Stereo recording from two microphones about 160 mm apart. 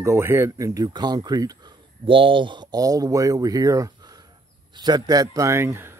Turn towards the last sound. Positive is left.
turn(degrees=-15)  # may be behind; listen again after turning